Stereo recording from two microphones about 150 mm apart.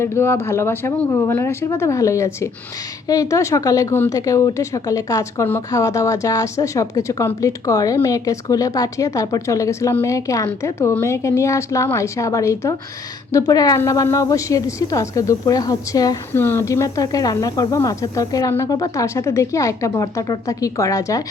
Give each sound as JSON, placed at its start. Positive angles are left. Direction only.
{"t": 0.0, "sound": "a woman's voice", "side_deg": 15}